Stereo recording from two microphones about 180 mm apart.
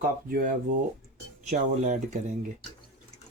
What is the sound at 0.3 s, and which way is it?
Speech, 50° right (ahead or behind).